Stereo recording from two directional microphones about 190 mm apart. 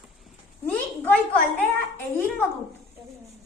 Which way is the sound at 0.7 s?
10° left (ahead or behind).